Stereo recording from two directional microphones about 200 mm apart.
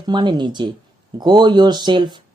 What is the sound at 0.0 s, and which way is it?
Speech, 20° right (ahead or behind).